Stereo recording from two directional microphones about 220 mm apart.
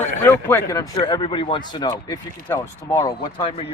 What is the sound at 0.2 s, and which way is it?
Speech, 10° left (ahead or behind).